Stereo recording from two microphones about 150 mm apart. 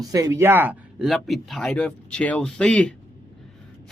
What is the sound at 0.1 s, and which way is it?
Speech, 20° right (ahead or behind).